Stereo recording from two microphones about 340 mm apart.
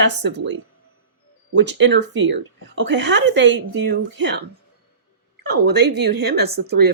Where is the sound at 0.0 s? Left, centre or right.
Right.